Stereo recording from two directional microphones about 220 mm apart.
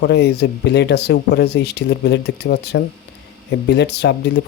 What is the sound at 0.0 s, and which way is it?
Speech, 50° left (ahead or behind).